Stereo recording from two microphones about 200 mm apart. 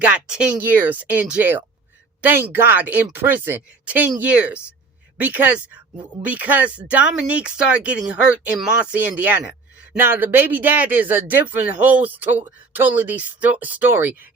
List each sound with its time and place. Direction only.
0.0 s speech: 5° right (ahead or behind)